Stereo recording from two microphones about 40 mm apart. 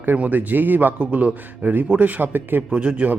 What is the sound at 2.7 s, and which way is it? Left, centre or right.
Speech, right.